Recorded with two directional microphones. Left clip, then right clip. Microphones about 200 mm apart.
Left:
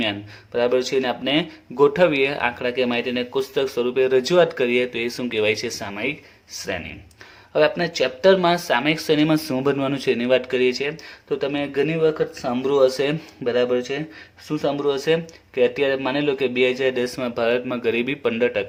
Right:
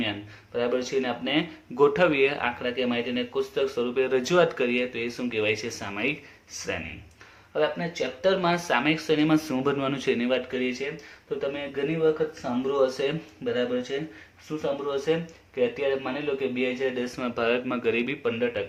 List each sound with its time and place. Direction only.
0.0 s speech: 45° left (ahead or behind)
7.5 s speech: 55° left (ahead or behind)
17.2 s speech: 35° left (ahead or behind)